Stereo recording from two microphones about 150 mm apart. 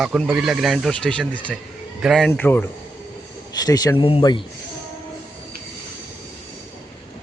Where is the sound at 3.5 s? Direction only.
25° left (ahead or behind).